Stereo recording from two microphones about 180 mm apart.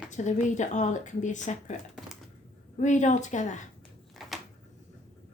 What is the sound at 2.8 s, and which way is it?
Speech, 40° left (ahead or behind).